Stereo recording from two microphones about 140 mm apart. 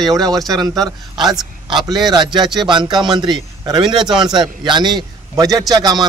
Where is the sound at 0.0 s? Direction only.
25° right (ahead or behind).